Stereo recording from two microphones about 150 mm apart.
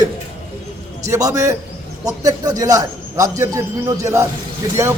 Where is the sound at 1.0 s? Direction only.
20° right (ahead or behind).